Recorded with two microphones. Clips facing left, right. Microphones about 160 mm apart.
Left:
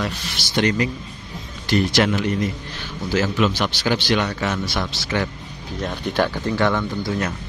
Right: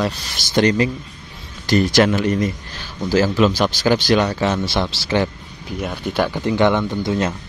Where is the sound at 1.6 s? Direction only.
40° right (ahead or behind).